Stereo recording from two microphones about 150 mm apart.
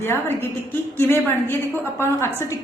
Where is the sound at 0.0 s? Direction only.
15° left (ahead or behind).